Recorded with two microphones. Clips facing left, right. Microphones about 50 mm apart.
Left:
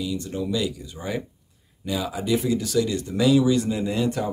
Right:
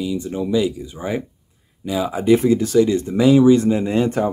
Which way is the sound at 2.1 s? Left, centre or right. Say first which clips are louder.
Right 10 dB; right.